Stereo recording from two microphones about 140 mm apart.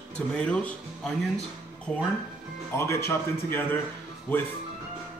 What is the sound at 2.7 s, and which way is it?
Speech, 20° left (ahead or behind).